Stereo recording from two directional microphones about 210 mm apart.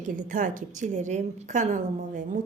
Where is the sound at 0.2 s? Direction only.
40° right (ahead or behind).